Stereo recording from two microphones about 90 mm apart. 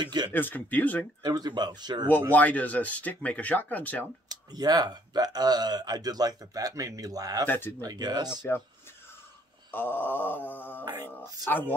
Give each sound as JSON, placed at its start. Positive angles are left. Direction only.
{"t": 0.0, "sound": "speech", "side_deg": -50}
{"t": 0.3, "sound": "wail", "side_deg": 20}
{"t": 1.2, "sound": "speech", "side_deg": -50}
{"t": 2.3, "sound": "speech", "side_deg": 20}
{"t": 4.5, "sound": "speech", "side_deg": -50}
{"t": 7.4, "sound": "wail", "side_deg": 25}
{"t": 7.8, "sound": "speech", "side_deg": -45}
{"t": 9.7, "sound": "wail", "side_deg": 25}